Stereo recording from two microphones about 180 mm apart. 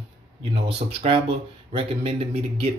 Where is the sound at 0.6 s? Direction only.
30° right (ahead or behind).